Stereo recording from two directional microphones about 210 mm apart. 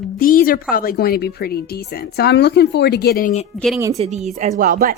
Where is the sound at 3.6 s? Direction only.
Centre (ahead or behind).